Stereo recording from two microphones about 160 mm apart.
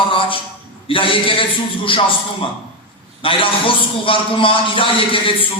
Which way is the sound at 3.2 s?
35° left (ahead or behind).